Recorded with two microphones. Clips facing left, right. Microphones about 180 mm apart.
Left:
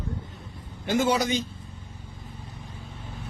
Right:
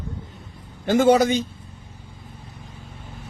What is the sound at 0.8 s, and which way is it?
Speech, 55° right (ahead or behind).